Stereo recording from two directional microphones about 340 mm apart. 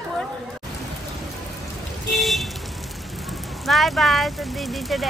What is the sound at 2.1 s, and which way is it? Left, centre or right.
Vehicle, centre.